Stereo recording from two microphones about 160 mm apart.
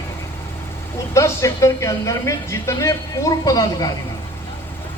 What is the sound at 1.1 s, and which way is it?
Speech, 20° left (ahead or behind).